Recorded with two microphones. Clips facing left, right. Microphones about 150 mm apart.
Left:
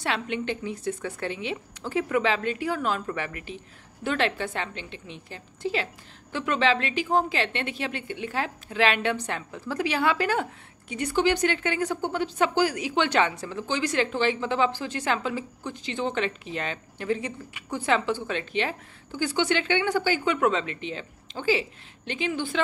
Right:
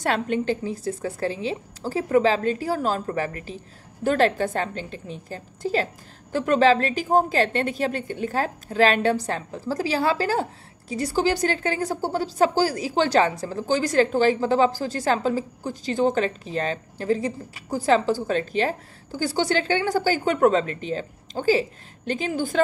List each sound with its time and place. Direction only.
0.0 s a woman's voice: 45° right (ahead or behind)